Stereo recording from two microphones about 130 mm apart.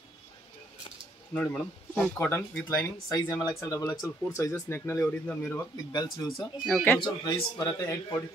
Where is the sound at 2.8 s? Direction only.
25° left (ahead or behind).